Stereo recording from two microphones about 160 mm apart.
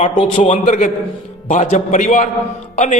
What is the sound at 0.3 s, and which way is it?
A man's voice, 50° left (ahead or behind).